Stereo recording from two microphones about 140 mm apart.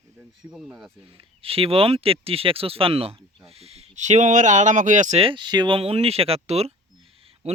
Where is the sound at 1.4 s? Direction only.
45° right (ahead or behind); by 5.2 s 60° right (ahead or behind).